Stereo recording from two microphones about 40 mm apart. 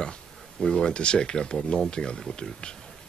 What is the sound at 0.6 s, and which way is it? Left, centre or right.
A man's voice, centre.